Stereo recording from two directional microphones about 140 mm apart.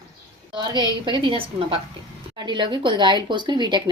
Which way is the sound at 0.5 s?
30° right (ahead or behind).